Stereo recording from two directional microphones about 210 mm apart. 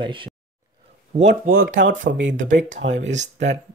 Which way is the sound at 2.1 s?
60° right (ahead or behind).